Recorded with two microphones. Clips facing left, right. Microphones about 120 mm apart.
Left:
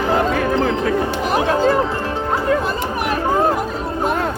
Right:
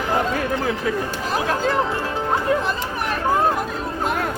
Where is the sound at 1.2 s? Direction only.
15° left (ahead or behind).